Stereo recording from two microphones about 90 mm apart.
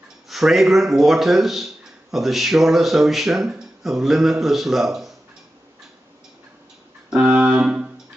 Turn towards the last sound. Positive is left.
turn(degrees=-10)  # may be behind; listen again after turning